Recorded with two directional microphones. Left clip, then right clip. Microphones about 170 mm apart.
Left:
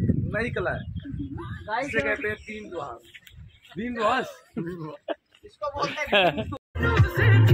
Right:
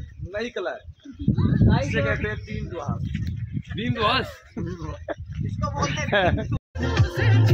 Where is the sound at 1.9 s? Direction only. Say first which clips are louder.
Even; centre (ahead or behind).